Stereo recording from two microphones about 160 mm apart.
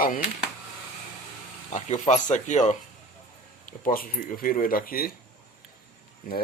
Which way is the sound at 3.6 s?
60° left (ahead or behind).